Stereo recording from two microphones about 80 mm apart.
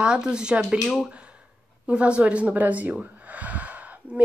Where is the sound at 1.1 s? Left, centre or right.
Centre.